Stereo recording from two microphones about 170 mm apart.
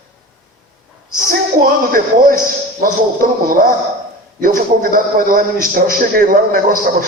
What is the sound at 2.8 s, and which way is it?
A man's voice, 55° right (ahead or behind).